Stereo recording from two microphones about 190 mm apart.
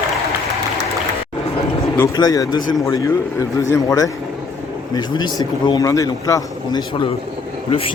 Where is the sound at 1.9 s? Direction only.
15° left (ahead or behind).